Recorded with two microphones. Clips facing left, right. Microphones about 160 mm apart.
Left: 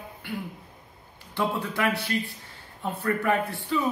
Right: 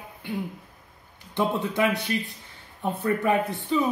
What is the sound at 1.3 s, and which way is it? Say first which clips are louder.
A man's voice: right 3 dB; 20° right (ahead or behind).